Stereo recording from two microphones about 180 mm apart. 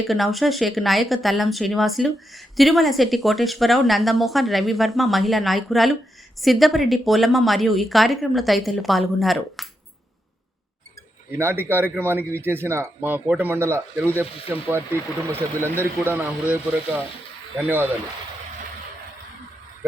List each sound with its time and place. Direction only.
0.1 s speech: centre (ahead or behind)
11.3 s speech: 15° right (ahead or behind)